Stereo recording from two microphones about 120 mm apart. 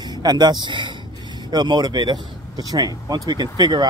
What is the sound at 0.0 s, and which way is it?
Speech, 35° right (ahead or behind).